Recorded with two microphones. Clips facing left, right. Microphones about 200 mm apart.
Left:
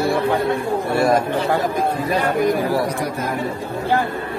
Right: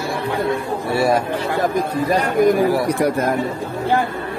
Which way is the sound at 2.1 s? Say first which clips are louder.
Right 4 dB; 45° right (ahead or behind).